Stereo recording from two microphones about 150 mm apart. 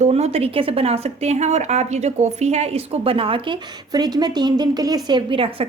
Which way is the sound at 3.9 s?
25° right (ahead or behind).